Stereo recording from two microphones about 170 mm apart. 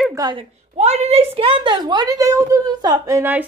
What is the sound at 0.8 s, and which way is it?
A woman's voice, 40° right (ahead or behind).